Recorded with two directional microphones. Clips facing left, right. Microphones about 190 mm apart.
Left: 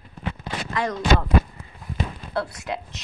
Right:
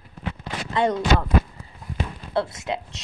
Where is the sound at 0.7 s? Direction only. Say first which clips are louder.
Right 5 dB; 30° right (ahead or behind).